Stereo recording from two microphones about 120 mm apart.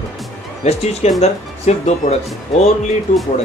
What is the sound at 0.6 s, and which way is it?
Speech, 60° left (ahead or behind).